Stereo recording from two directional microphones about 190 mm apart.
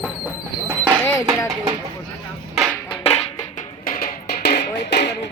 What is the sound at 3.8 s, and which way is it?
Music, 50° left (ahead or behind).